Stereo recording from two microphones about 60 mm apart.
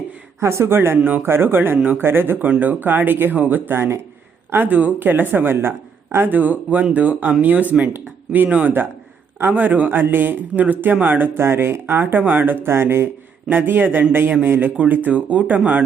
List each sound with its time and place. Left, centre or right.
0.3 s speech: right
3.7 s speech: right
4.5 s speech: right
6.3 s speech: right
11.3 s speech: right